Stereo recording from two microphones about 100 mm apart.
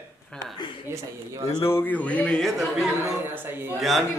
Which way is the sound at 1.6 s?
20° left (ahead or behind).